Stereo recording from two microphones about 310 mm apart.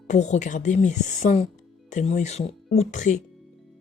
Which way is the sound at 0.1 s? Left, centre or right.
Left.